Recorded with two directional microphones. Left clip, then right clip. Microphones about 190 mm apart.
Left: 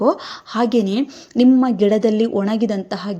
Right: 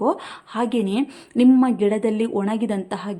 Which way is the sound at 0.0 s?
15° left (ahead or behind).